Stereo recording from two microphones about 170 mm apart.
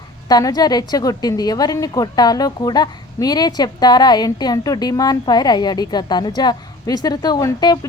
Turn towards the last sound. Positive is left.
turn(degrees=25)  # may be behind; listen again after turning